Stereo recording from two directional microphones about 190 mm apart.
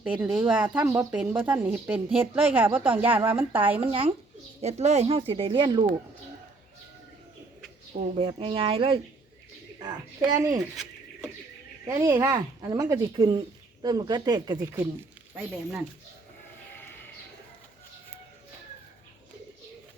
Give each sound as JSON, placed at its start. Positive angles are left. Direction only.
{"t": 0.0, "sound": "speech", "side_deg": -5}
{"t": 3.8, "sound": "speech", "side_deg": -30}
{"t": 7.9, "sound": "speech", "side_deg": -35}
{"t": 11.9, "sound": "speech", "side_deg": -15}